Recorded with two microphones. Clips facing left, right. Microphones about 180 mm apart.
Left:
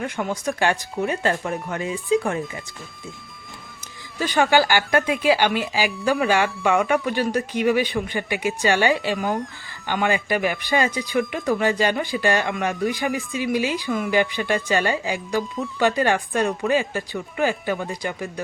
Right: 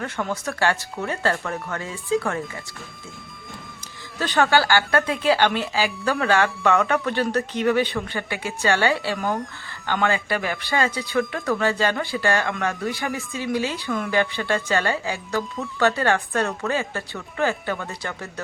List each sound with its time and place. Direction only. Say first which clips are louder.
0.0 s speech: left 2 dB; 15° left (ahead or behind)
4.2 s speech: left 1 dB; 10° left (ahead or behind)
9.1 s speech: left 1 dB; centre (ahead or behind)
9.8 s speech: left 1 dB; 15° left (ahead or behind)